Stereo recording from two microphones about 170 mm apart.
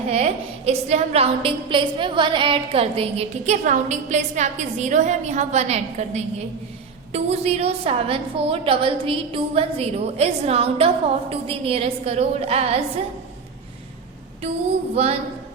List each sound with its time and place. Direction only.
0.1 s a woman's voice: 40° right (ahead or behind)
14.9 s a woman's voice: 40° right (ahead or behind)